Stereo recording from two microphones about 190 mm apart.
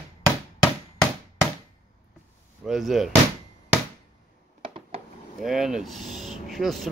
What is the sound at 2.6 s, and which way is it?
Speech, centre (ahead or behind).